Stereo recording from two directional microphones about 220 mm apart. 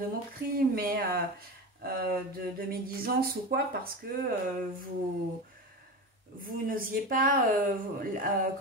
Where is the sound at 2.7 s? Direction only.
45° right (ahead or behind).